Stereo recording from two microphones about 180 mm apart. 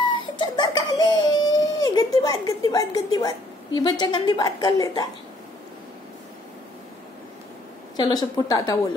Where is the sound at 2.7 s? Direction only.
20° left (ahead or behind).